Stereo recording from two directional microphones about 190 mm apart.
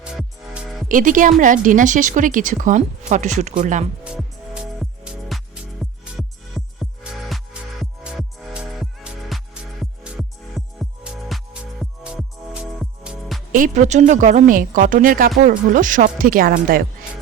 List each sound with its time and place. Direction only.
0.0 s music: 5° right (ahead or behind)
0.9 s a woman's voice: 45° right (ahead or behind)
4.0 s music: 5° right (ahead or behind)
13.5 s a woman's voice: 45° right (ahead or behind)